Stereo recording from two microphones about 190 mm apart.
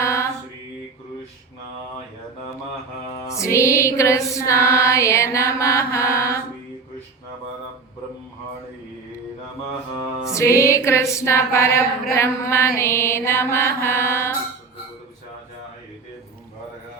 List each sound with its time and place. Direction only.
0.0 s mantra: 15° left (ahead or behind)
3.2 s music: 15° left (ahead or behind)
10.2 s music: 15° left (ahead or behind)